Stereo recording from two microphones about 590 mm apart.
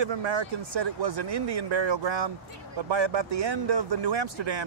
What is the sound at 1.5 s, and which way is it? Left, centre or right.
Speech, right.